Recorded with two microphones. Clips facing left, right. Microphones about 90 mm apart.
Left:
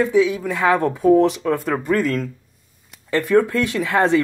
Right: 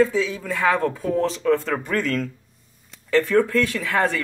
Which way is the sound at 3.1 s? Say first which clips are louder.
Left 2 dB; 15° left (ahead or behind).